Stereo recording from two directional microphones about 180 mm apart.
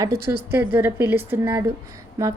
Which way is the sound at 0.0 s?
15° right (ahead or behind).